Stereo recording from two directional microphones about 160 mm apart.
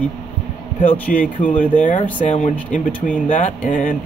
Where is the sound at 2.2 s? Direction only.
45° left (ahead or behind).